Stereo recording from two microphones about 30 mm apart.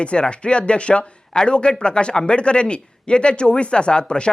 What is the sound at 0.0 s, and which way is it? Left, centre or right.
A man's voice, left.